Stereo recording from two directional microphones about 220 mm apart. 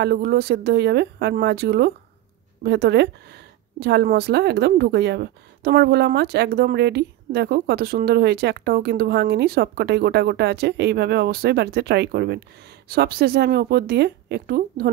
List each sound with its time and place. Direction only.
0.0 s speech: 45° right (ahead or behind)